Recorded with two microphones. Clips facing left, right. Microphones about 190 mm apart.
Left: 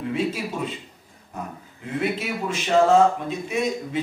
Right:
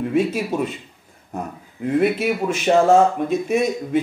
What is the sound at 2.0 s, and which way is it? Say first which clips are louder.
Speech: right 7 dB; 50° right (ahead or behind).